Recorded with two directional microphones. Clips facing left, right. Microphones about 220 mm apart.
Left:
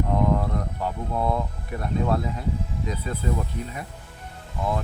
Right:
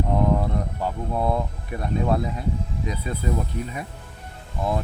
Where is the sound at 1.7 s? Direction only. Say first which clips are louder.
Right 1 dB; 15° right (ahead or behind).